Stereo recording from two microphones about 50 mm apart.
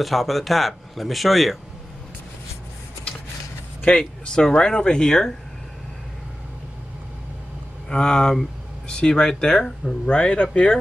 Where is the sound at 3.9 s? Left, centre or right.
Centre.